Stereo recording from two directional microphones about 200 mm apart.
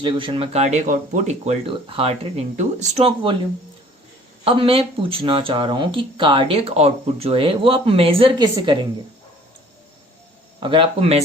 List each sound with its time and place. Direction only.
0.0 s speech: 25° right (ahead or behind)
4.4 s speech: 25° right (ahead or behind)
10.6 s speech: 25° right (ahead or behind)